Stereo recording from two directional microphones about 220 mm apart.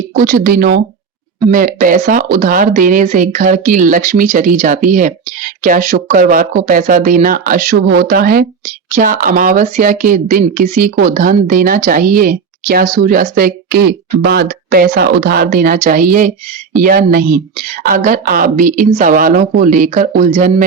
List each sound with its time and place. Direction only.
0.2 s speech: 40° right (ahead or behind)